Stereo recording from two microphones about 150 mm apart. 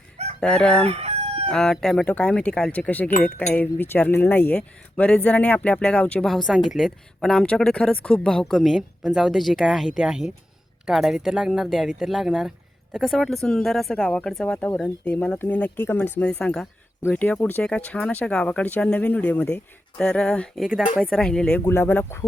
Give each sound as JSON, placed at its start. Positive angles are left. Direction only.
{"t": 0.3, "sound": "speech", "side_deg": 5}
{"t": 0.9, "sound": "chicken", "side_deg": -40}
{"t": 1.5, "sound": "speech", "side_deg": 5}
{"t": 21.6, "sound": "speech", "side_deg": 15}